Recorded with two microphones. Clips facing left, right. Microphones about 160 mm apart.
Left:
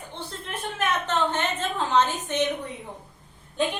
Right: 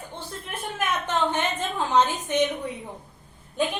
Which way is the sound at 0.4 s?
10° right (ahead or behind).